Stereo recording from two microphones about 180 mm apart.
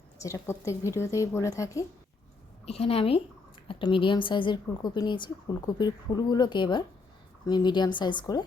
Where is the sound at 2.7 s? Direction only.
35° left (ahead or behind).